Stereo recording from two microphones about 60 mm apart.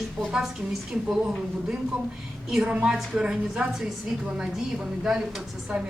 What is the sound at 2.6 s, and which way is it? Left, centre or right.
A woman's voice, right.